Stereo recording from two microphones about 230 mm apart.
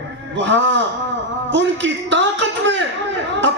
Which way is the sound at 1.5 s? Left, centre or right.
Right.